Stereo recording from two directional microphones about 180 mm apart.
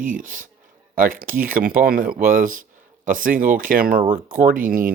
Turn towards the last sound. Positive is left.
turn(degrees=-50)  # may be behind; listen again after turning